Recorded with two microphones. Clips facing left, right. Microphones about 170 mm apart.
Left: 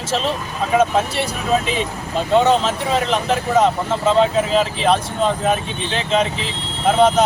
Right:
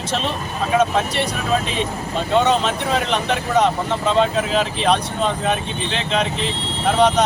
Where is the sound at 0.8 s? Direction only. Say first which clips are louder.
Left 2 dB; 5° left (ahead or behind).